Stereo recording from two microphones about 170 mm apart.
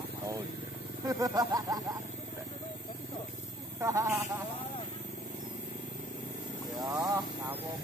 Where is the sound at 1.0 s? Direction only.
20° right (ahead or behind).